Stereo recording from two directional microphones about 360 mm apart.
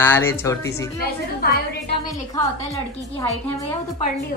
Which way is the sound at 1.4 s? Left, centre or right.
Left.